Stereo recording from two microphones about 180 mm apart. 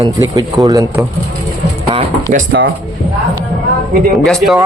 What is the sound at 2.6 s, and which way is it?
Speech, 75° right (ahead or behind).